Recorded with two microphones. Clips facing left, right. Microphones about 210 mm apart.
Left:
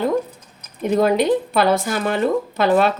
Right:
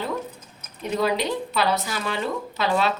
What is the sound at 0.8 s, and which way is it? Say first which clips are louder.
Speech: left 7 dB; 50° left (ahead or behind).